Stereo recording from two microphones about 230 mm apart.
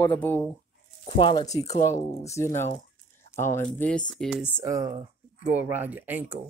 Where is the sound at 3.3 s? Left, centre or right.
Centre.